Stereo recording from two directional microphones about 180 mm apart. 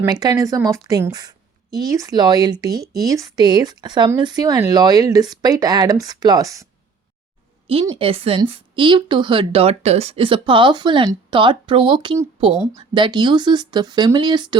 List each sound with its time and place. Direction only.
0.0 s speech: 20° right (ahead or behind)
7.9 s speech: 30° right (ahead or behind)